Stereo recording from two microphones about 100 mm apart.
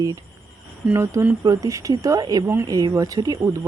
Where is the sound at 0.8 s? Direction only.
20° right (ahead or behind); by 2.4 s 40° right (ahead or behind).